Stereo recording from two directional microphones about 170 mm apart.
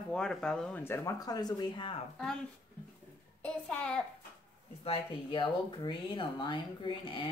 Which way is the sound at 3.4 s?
5° left (ahead or behind).